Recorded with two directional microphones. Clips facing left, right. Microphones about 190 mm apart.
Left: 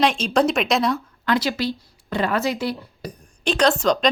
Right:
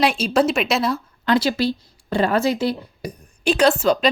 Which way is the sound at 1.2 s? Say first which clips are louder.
Right 4 dB; 30° right (ahead or behind).